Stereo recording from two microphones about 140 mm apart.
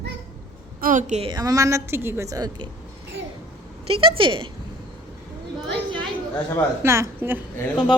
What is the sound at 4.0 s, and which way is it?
Speech, 40° right (ahead or behind).